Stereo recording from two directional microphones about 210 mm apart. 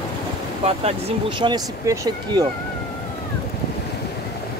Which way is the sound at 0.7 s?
30° right (ahead or behind).